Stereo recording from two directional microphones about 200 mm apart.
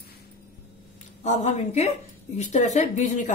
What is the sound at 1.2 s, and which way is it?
A woman's voice, 35° left (ahead or behind).